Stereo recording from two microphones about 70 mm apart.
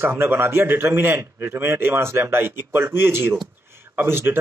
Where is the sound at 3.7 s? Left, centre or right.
Right.